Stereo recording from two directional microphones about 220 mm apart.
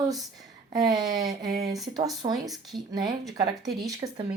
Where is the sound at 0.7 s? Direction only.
20° right (ahead or behind).